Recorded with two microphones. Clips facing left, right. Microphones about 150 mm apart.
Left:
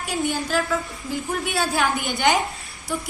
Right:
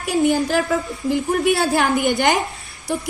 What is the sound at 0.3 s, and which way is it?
A woman's voice, 50° right (ahead or behind).